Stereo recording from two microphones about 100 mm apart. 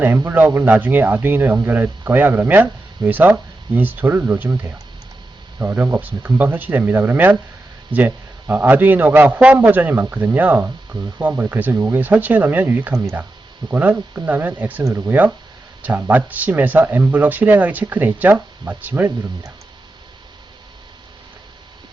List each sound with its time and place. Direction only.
0.0 s speech: 20° right (ahead or behind)